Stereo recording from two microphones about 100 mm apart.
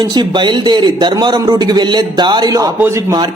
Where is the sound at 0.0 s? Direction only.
45° right (ahead or behind).